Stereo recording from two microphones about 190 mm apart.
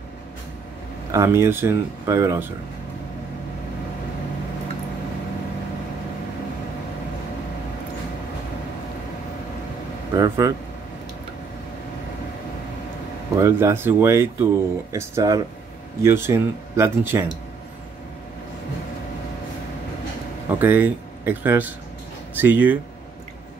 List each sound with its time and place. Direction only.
1.1 s speech: 15° right (ahead or behind)
10.1 s speech: 15° right (ahead or behind)
13.4 s speech: 15° right (ahead or behind)
20.5 s speech: 10° right (ahead or behind)